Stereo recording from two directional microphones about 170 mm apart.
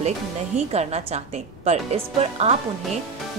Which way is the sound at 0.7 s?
40° right (ahead or behind).